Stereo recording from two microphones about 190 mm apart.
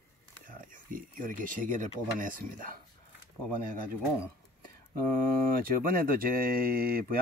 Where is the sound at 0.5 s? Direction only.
45° right (ahead or behind).